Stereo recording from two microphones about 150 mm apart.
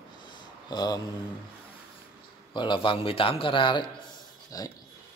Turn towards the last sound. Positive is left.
turn(degrees=25)  # may be behind; listen again after turning